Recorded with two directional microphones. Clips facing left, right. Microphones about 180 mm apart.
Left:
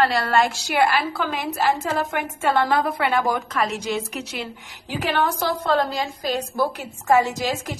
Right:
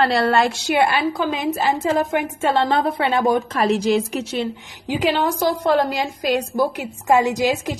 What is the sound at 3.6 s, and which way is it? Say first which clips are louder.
Speech: right 8 dB; 30° right (ahead or behind).